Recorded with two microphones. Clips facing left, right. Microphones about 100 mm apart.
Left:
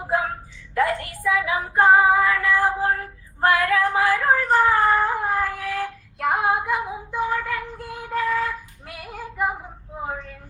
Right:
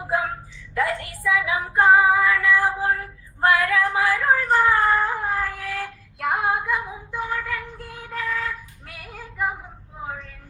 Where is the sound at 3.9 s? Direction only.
25° left (ahead or behind).